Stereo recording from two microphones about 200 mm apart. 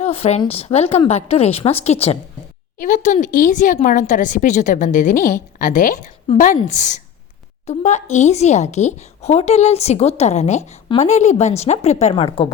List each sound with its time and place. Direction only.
0.0 s speech: 30° left (ahead or behind)